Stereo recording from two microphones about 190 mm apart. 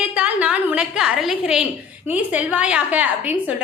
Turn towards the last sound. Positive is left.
turn(degrees=-10)  # may be behind; listen again after turning